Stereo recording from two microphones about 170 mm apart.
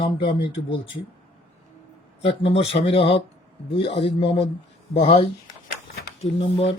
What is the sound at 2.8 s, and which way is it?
Speech, 35° left (ahead or behind).